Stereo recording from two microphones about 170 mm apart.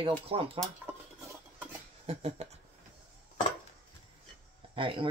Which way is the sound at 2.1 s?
40° right (ahead or behind).